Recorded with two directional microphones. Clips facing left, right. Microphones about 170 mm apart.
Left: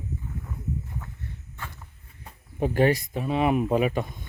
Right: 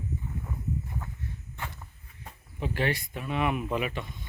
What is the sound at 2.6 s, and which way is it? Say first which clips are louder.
Speech: left 8 dB; 45° left (ahead or behind).